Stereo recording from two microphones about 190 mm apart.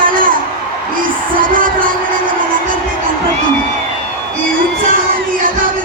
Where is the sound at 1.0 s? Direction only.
45° right (ahead or behind).